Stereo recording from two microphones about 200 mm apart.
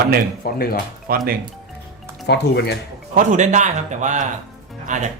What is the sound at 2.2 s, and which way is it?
Speech, 55° left (ahead or behind).